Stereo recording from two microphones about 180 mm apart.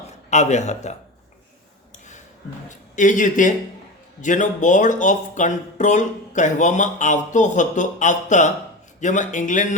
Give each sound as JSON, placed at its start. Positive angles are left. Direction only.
{"t": 0.3, "sound": "a man's voice", "side_deg": 40}
{"t": 2.6, "sound": "speech", "side_deg": 45}